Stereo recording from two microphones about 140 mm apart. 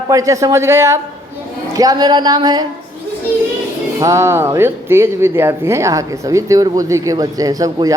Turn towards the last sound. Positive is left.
turn(degrees=-25)  # may be behind; listen again after turning